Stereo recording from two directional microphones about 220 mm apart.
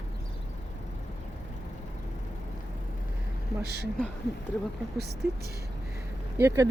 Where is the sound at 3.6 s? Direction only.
45° right (ahead or behind).